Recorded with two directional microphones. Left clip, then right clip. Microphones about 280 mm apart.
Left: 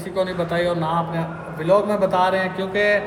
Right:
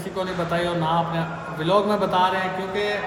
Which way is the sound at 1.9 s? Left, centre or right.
Centre.